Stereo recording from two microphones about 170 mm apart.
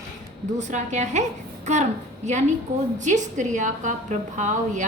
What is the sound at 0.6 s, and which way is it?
A woman's voice, 45° right (ahead or behind).